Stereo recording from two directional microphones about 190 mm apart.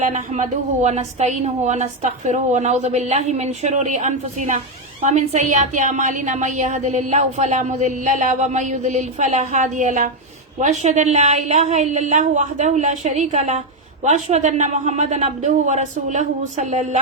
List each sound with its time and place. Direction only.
0.0 s a woman's voice: 40° right (ahead or behind)